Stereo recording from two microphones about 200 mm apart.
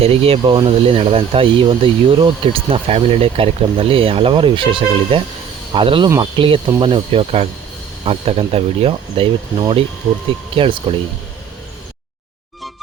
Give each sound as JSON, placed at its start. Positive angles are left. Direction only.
{"t": 0.0, "sound": "speech", "side_deg": -30}